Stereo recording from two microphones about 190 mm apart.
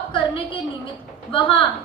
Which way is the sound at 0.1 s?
25° left (ahead or behind).